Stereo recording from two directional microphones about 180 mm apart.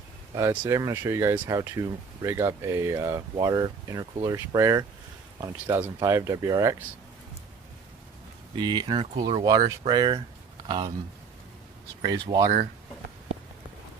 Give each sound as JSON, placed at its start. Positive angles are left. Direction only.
{"t": 0.3, "sound": "speech", "side_deg": -10}
{"t": 8.5, "sound": "speech", "side_deg": -25}
{"t": 12.2, "sound": "speech", "side_deg": -25}